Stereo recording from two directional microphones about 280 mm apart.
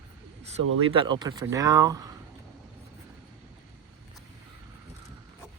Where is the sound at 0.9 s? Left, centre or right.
Centre.